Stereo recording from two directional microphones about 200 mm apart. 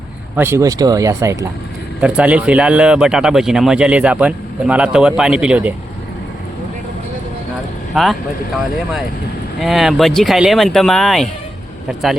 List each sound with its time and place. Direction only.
0.3 s speech: 10° right (ahead or behind)
7.9 s speech: 5° right (ahead or behind)
9.6 s speech: centre (ahead or behind)